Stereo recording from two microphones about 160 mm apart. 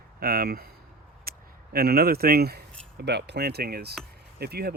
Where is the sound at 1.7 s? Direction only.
70° right (ahead or behind).